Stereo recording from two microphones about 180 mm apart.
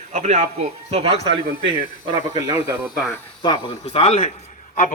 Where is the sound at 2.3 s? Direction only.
35° left (ahead or behind).